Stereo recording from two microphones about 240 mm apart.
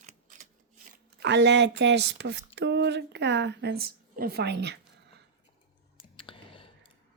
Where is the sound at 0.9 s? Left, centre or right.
Right.